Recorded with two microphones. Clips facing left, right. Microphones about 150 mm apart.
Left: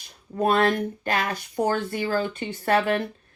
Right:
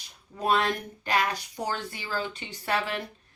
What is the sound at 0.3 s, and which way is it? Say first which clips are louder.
Speech: left 5 dB; 50° left (ahead or behind).